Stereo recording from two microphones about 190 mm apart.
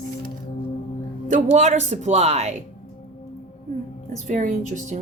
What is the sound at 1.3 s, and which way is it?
Speech, 40° right (ahead or behind).